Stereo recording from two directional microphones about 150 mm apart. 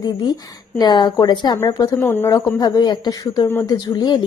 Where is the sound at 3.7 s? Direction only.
25° left (ahead or behind).